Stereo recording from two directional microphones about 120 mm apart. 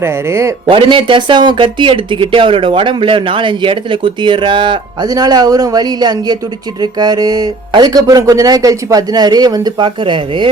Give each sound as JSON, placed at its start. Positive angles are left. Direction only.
{"t": 0.0, "sound": "speech", "side_deg": -20}
{"t": 0.7, "sound": "speech", "side_deg": -45}